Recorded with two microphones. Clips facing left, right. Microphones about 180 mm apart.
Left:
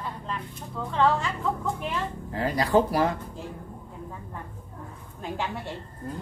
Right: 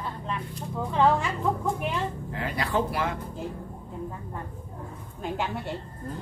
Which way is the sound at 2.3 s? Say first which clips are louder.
Left 8 dB; 40° left (ahead or behind).